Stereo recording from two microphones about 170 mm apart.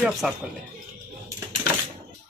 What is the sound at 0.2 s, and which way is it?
Speech, centre (ahead or behind).